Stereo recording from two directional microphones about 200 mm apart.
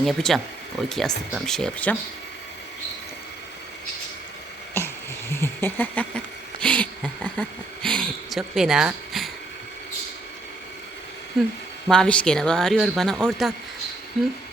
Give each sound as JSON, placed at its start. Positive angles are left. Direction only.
{"t": 0.0, "sound": "speech", "side_deg": 0}
{"t": 4.8, "sound": "a sound", "side_deg": 10}
{"t": 11.9, "sound": "speech", "side_deg": 5}